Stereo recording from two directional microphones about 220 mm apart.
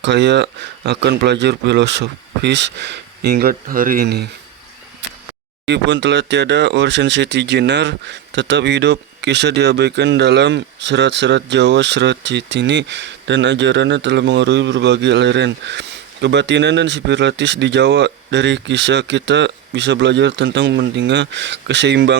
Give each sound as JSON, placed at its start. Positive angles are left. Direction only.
{"t": 0.0, "sound": "speech", "side_deg": -50}
{"t": 5.6, "sound": "speech", "side_deg": -50}